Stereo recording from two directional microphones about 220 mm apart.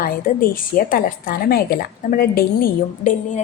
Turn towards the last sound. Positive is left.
turn(degrees=35)  # may be behind; listen again after turning